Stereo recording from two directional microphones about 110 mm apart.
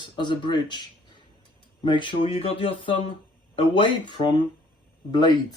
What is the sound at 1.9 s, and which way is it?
Speech, 45° left (ahead or behind).